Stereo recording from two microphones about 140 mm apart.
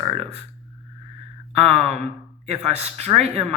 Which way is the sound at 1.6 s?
50° right (ahead or behind).